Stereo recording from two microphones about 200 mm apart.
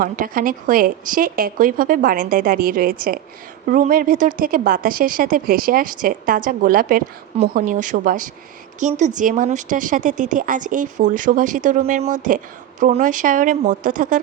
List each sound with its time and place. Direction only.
0.0 s speech: 45° right (ahead or behind)